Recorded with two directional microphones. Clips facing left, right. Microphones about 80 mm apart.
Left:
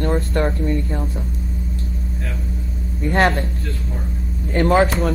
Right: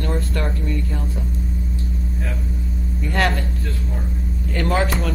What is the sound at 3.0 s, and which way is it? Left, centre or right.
Speech, left.